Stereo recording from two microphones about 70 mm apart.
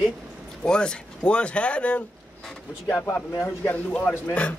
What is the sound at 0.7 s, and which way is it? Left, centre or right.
Speech, centre.